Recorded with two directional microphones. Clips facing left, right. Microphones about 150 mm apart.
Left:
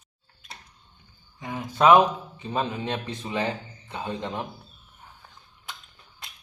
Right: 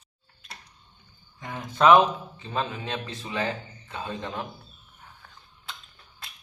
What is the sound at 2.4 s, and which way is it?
Speech, 15° left (ahead or behind).